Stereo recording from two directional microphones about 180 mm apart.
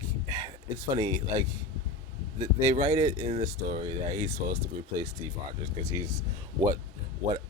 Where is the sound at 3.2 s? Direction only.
45° right (ahead or behind).